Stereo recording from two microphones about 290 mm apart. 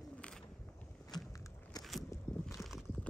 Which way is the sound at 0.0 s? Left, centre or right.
Centre.